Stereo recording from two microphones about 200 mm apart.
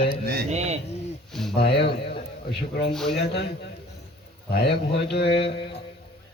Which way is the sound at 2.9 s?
Centre (ahead or behind).